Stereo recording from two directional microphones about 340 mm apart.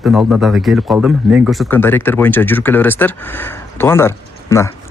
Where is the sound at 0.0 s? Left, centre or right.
Centre.